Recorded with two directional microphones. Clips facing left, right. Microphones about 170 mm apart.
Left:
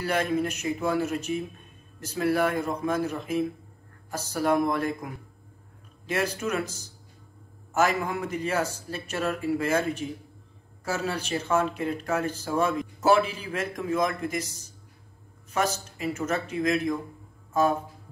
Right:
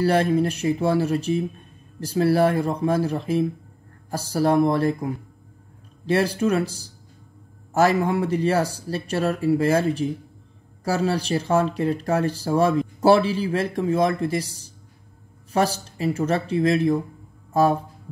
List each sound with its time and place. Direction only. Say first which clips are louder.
0.0 s speech: right 7 dB; 35° right (ahead or behind)